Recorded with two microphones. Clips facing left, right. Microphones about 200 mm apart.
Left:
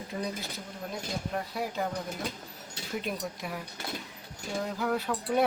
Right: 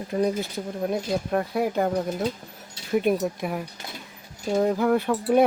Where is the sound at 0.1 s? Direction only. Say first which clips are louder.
Right 11 dB; 65° right (ahead or behind).